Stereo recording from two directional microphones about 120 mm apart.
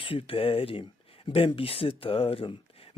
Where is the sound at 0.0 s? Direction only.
50° left (ahead or behind).